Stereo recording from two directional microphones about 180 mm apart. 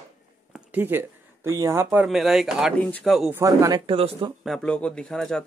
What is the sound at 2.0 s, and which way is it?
Speech, centre (ahead or behind).